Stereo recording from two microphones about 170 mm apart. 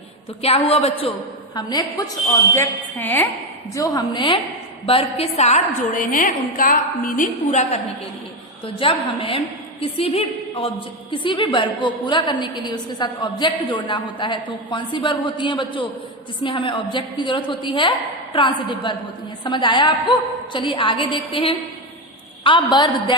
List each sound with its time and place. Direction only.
0.4 s a woman's voice: 35° left (ahead or behind)
2.6 s a woman's voice: 10° left (ahead or behind); by 7.8 s 45° left (ahead or behind)
8.6 s a woman's voice: 30° left (ahead or behind)